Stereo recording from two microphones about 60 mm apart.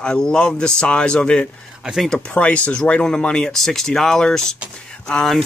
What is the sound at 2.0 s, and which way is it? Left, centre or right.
Speech, centre.